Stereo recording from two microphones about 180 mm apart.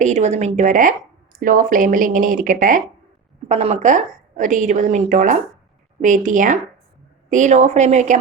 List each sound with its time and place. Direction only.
0.0 s a woman's voice: 40° right (ahead or behind)
3.5 s a woman's voice: 35° right (ahead or behind)